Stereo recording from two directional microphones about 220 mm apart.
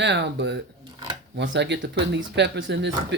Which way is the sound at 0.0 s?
50° right (ahead or behind).